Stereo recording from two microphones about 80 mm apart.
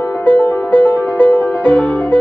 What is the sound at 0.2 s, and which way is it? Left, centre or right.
Music, centre.